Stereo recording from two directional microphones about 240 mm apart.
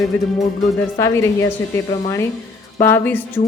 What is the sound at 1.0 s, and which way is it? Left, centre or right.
Speech, centre.